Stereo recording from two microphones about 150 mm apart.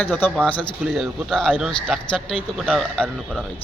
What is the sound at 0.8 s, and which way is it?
A man's voice, centre (ahead or behind).